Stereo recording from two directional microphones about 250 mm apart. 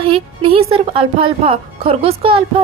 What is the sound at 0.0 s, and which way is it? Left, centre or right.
A woman's voice, right.